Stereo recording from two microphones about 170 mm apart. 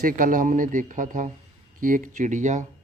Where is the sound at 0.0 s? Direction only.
55° right (ahead or behind).